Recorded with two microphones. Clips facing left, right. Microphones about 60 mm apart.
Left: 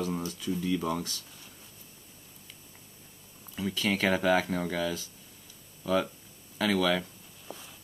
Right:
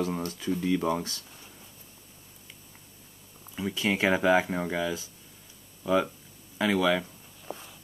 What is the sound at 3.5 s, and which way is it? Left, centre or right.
Speech, centre.